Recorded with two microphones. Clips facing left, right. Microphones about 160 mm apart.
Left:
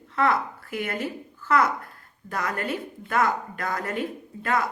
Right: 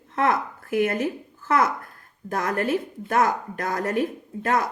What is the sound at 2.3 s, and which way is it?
A woman's voice, 45° right (ahead or behind).